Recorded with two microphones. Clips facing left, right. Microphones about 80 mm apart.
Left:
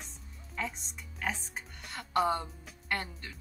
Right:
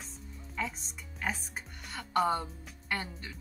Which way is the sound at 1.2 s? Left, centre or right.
Centre.